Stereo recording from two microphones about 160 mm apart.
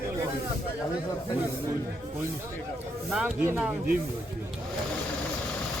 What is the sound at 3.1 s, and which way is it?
Speech, 10° right (ahead or behind).